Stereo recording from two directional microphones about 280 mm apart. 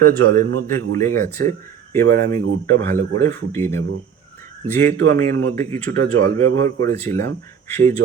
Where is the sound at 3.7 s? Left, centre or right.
Right.